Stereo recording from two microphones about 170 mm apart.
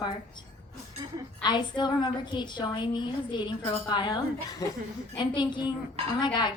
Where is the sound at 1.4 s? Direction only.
25° left (ahead or behind).